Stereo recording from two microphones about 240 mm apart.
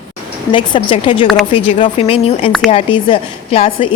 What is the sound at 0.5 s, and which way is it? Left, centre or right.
A woman's voice, left.